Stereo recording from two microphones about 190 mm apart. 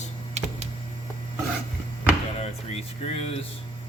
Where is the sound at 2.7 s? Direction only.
30° left (ahead or behind).